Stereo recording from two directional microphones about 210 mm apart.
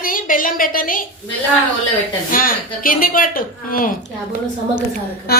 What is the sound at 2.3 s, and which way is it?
Speech, 40° left (ahead or behind).